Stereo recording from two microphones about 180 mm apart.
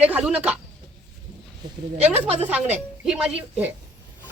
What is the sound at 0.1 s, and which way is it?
Speech, 5° right (ahead or behind).